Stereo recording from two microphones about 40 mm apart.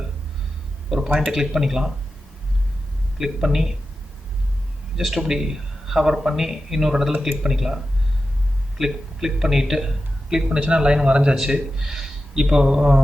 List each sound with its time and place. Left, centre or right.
0.9 s a sound: centre
1.3 s a man's voice: centre
3.2 s a man's voice: centre
4.9 s a man's voice: centre
8.8 s a man's voice: centre
10.6 s a man's voice: right